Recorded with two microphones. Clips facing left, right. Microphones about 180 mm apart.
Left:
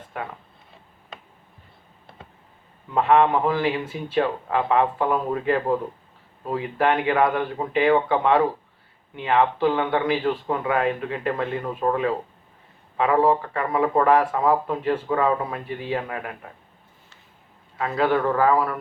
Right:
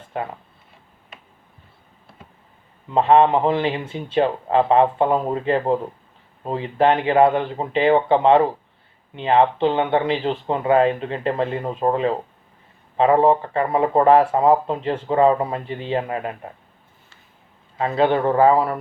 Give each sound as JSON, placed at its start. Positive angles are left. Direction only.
{"t": 0.1, "sound": "speech", "side_deg": -25}
{"t": 2.9, "sound": "speech", "side_deg": -25}
{"t": 17.7, "sound": "speech", "side_deg": -25}